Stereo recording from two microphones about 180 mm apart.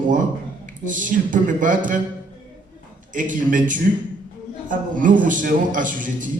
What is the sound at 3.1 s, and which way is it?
A man's voice, 45° right (ahead or behind).